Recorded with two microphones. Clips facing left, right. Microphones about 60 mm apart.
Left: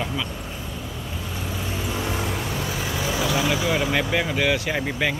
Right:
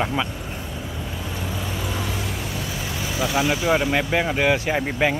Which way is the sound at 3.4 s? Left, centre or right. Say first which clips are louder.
Right 5 dB; centre.